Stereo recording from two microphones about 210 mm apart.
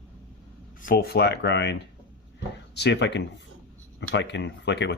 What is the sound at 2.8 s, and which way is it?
Speech, 55° left (ahead or behind).